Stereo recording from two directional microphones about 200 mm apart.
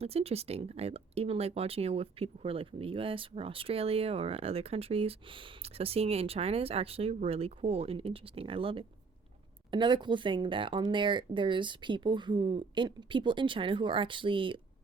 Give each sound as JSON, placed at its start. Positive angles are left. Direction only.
{"t": 0.0, "sound": "speech", "side_deg": -30}